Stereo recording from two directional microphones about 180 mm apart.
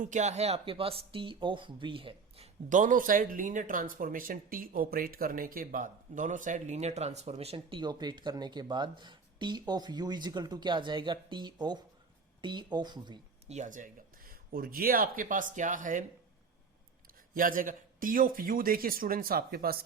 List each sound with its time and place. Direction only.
0.0 s speech: 40° right (ahead or behind); by 13.1 s 25° right (ahead or behind)
13.5 s speech: 45° right (ahead or behind)
17.3 s speech: 50° right (ahead or behind)